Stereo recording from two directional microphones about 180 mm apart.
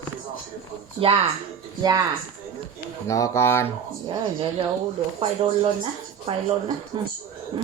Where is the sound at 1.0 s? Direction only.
30° right (ahead or behind).